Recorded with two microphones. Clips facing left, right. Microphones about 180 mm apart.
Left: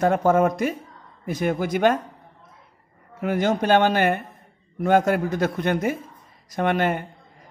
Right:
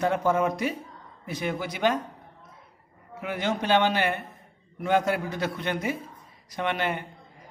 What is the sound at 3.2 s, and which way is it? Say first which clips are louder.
A man's voice: left 7 dB; 45° left (ahead or behind).